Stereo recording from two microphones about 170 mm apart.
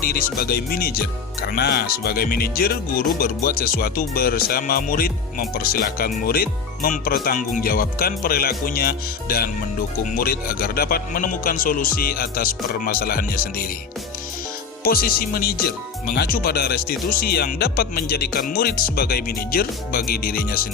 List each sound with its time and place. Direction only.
0.0 s speech: 60° left (ahead or behind)
14.8 s speech: 60° left (ahead or behind)